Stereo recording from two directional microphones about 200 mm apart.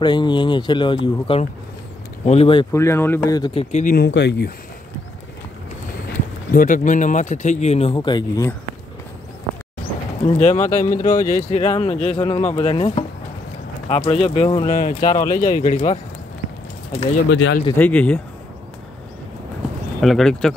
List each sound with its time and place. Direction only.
0.0 s speech: 25° left (ahead or behind)
2.7 s speech: 15° left (ahead or behind)
3.7 s speech: 45° left (ahead or behind)
6.5 s speech: 40° left (ahead or behind); by 8.5 s 15° left (ahead or behind)
10.2 s speech: 35° left (ahead or behind)
15.5 s speech: 30° left (ahead or behind)
17.3 s speech: 70° left (ahead or behind)
17.7 s speech: 5° left (ahead or behind)
20.0 s speech: centre (ahead or behind)